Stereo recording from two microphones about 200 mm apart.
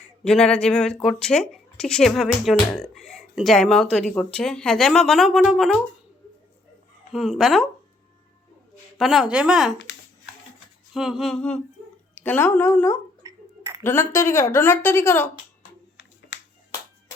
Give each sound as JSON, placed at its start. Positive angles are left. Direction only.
{"t": 0.3, "sound": "speech", "side_deg": 5}
{"t": 7.1, "sound": "speech", "side_deg": 0}
{"t": 9.0, "sound": "speech", "side_deg": 0}
{"t": 10.9, "sound": "a woman's voice", "side_deg": 0}
{"t": 13.2, "sound": "chink", "side_deg": -15}
{"t": 13.8, "sound": "a woman's voice", "side_deg": 10}
{"t": 16.3, "sound": "music", "side_deg": 65}